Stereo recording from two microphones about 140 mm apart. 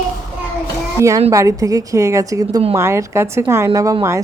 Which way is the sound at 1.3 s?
25° right (ahead or behind).